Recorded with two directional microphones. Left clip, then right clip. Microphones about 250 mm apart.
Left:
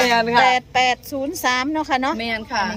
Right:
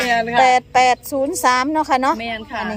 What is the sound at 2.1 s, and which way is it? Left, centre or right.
Speech, left.